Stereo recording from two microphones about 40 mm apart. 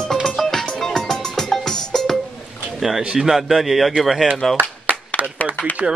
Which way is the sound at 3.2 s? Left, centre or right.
Centre.